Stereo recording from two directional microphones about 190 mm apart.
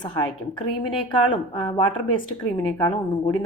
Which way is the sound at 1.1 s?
25° left (ahead or behind).